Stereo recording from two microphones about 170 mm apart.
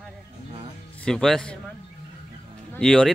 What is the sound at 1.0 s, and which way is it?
Speech, 5° left (ahead or behind).